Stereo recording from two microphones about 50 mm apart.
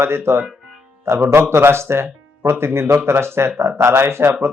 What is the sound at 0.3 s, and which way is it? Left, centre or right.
Speech, right.